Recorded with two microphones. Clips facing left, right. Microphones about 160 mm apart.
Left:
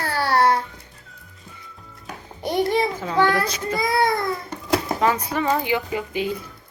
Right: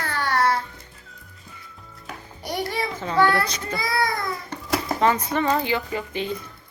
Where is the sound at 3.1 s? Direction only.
15° left (ahead or behind).